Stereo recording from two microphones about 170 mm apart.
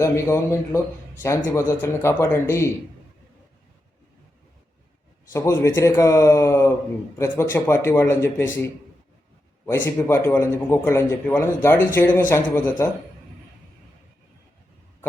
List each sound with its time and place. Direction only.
0.0 s a man's voice: 15° left (ahead or behind)
5.3 s a man's voice: 15° left (ahead or behind)
9.6 s a man's voice: 15° left (ahead or behind)